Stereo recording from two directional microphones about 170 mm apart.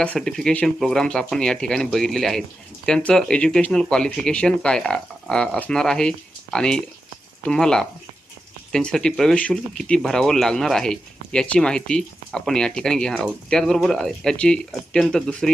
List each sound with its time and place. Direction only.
0.0 s speech: 5° left (ahead or behind)